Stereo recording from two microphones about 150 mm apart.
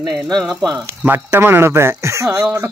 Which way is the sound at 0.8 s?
15° right (ahead or behind).